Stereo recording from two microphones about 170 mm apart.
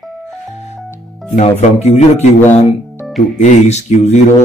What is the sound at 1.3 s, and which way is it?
Speech, 40° left (ahead or behind).